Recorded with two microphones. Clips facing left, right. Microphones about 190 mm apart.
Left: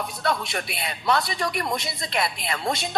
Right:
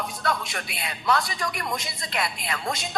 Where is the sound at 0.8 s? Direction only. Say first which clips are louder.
Left 1 dB; 25° left (ahead or behind).